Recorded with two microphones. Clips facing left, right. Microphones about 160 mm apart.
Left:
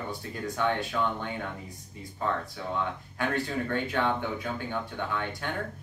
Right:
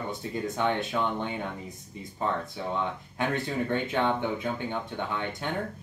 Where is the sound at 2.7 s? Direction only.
20° right (ahead or behind).